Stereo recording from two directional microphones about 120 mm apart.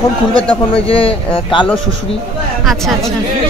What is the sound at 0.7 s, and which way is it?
Speech, 50° left (ahead or behind).